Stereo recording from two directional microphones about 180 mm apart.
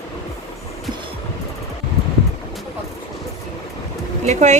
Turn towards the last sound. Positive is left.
turn(degrees=-40)  # may be behind; listen again after turning